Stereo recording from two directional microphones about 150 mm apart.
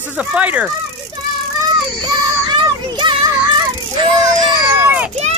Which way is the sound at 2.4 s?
30° right (ahead or behind).